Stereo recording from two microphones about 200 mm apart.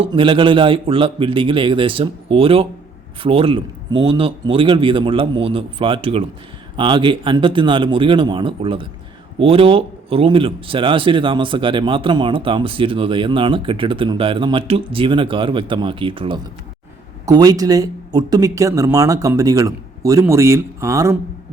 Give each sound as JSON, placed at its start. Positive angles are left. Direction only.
{"t": 0.0, "sound": "speech", "side_deg": -25}